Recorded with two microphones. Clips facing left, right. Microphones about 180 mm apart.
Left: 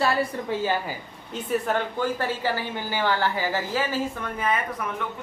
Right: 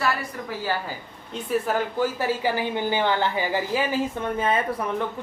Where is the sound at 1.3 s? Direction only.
5° right (ahead or behind).